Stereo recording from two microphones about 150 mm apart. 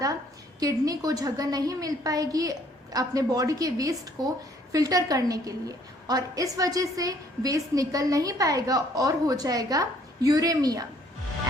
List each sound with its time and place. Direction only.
0.6 s a woman's voice: 25° right (ahead or behind)